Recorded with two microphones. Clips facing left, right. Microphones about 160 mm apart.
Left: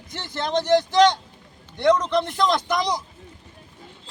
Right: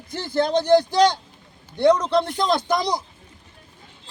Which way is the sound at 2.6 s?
30° right (ahead or behind).